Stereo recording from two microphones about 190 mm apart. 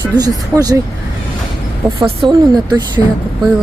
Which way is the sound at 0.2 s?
20° right (ahead or behind).